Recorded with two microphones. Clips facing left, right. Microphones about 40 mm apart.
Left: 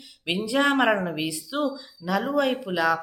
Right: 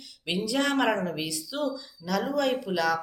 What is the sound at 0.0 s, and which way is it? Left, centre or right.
Speech, left.